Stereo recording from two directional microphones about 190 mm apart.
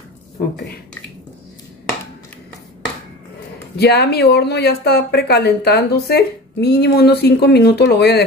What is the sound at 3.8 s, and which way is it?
Speech, 60° left (ahead or behind).